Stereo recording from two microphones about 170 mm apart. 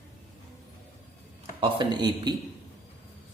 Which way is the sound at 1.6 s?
25° right (ahead or behind).